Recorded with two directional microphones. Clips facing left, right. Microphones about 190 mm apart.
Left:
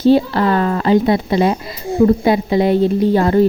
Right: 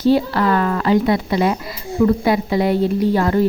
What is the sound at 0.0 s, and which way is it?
A woman's voice, 25° left (ahead or behind).